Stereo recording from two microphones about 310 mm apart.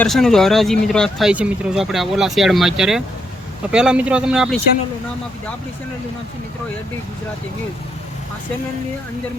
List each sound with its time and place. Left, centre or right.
0.0 s speech: centre